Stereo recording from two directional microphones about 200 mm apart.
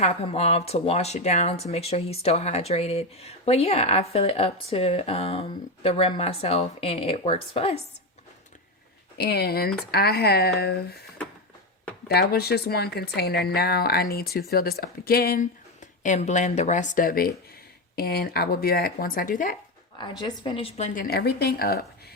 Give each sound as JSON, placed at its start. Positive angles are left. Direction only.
{"t": 0.0, "sound": "speech", "side_deg": 30}
{"t": 9.1, "sound": "speech", "side_deg": 55}
{"t": 12.0, "sound": "speech", "side_deg": 50}
{"t": 20.0, "sound": "speech", "side_deg": 25}